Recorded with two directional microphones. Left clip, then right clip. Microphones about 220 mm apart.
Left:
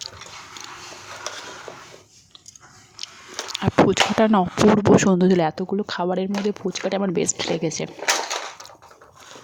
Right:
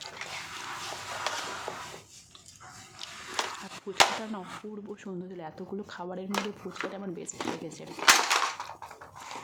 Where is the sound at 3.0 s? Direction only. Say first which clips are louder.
Left 7 dB; 20° left (ahead or behind).